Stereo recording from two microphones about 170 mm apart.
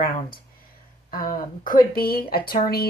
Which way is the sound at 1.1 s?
55° left (ahead or behind).